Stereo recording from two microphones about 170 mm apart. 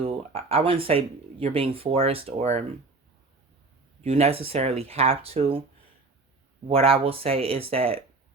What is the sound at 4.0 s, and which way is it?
Speech, 40° right (ahead or behind).